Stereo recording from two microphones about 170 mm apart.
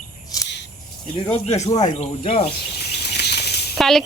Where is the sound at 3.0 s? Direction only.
80° left.